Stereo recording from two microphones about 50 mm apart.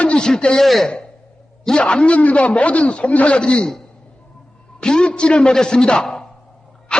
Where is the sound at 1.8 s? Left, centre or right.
Left.